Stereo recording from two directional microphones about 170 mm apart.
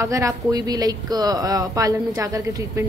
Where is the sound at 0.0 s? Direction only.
20° right (ahead or behind).